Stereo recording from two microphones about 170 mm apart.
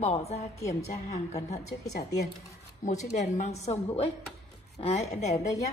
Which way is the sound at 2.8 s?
45° left (ahead or behind).